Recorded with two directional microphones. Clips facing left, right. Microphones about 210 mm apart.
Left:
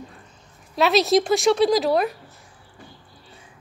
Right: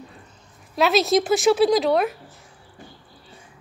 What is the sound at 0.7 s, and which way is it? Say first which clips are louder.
A woman's voice: left 1 dB; centre (ahead or behind).